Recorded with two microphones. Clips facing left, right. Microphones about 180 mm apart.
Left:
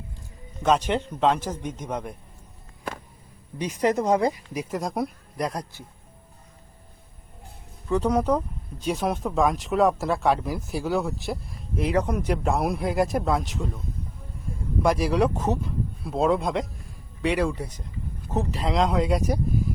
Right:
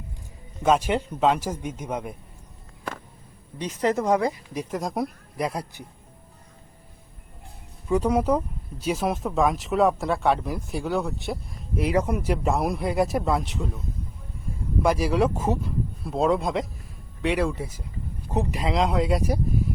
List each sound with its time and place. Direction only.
0.6 s a man's voice: 5° right (ahead or behind)
3.6 s speech: 15° left (ahead or behind)
4.5 s speech: centre (ahead or behind)
7.9 s a man's voice: 10° right (ahead or behind)
18.7 s speech: centre (ahead or behind)